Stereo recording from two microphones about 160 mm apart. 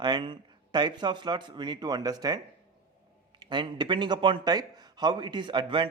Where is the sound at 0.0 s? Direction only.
30° right (ahead or behind).